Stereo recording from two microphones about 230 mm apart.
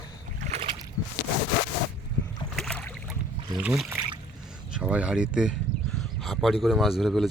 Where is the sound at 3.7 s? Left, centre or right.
Centre.